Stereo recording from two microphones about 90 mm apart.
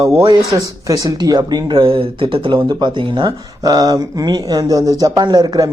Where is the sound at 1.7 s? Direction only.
85° right.